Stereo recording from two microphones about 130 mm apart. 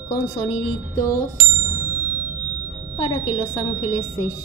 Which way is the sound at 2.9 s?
45° left (ahead or behind).